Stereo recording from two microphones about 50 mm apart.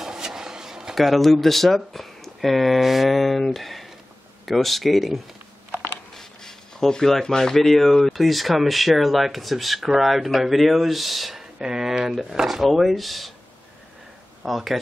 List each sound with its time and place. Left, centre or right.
0.0 s a sound: centre
0.9 s speech: centre
14.4 s speech: centre